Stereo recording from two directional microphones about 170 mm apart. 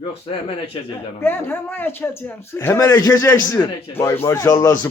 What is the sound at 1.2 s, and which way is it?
Speech, 10° left (ahead or behind).